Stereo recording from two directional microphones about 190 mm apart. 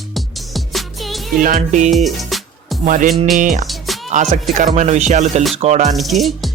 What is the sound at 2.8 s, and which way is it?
Music, 45° right (ahead or behind).